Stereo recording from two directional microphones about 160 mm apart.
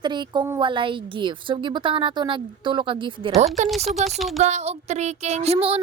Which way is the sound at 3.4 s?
45° right (ahead or behind).